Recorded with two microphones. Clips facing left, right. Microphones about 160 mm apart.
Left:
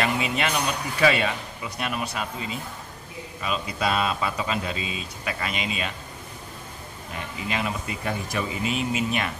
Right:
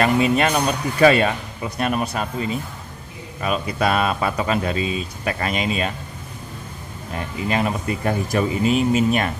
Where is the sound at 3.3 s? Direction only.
55° right (ahead or behind).